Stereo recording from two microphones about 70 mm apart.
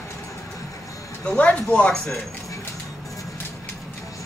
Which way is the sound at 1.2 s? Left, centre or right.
Centre.